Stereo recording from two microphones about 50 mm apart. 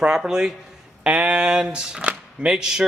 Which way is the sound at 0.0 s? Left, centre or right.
Centre.